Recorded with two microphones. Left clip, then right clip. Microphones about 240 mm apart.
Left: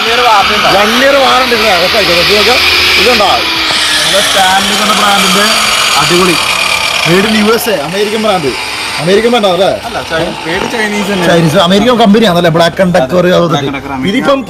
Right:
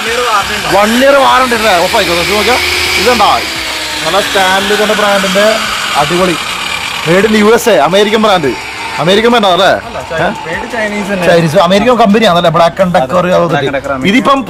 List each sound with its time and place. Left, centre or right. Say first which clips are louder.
1.0 s speech: right 1 dB; centre
9.3 s speech: right 1 dB; centre
11.5 s speech: even; right